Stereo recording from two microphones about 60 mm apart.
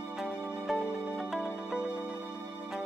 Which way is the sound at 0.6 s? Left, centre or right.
Centre.